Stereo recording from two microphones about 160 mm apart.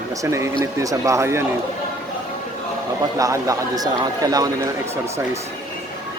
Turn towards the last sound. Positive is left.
turn(degrees=-20)  # may be behind; listen again after turning